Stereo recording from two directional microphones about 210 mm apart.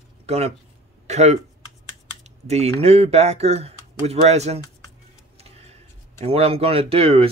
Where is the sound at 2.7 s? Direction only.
30° right (ahead or behind).